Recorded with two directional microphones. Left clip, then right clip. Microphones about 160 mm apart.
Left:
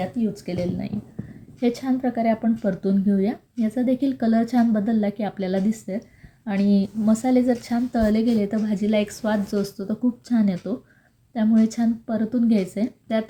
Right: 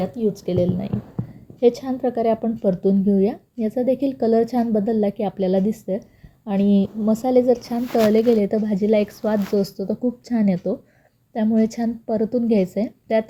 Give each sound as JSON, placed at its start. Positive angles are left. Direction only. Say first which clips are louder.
{"t": 0.0, "sound": "a woman's voice", "louder": "right 4 dB", "side_deg": -25}
{"t": 6.6, "sound": "a woman's voice", "louder": "right 3 dB", "side_deg": 25}
{"t": 7.0, "sound": "a woman's voice", "louder": "right 4 dB", "side_deg": -5}